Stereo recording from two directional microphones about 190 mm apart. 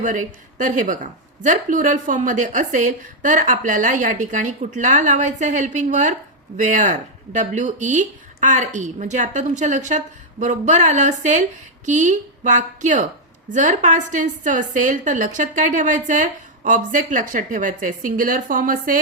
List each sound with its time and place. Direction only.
0.0 s a woman's voice: 40° right (ahead or behind)